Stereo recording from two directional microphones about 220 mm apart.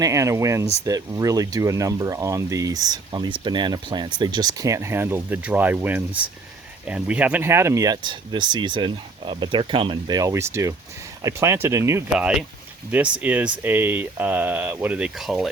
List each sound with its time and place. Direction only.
0.0 s speech: 15° right (ahead or behind)